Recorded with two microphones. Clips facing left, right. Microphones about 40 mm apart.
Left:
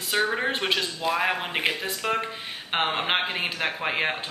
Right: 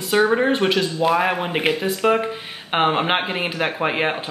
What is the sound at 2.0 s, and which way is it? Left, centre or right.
Speech, centre.